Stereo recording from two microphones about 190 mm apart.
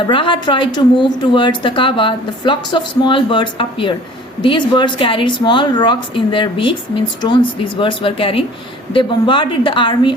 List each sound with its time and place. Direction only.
0.1 s a woman's voice: 25° left (ahead or behind)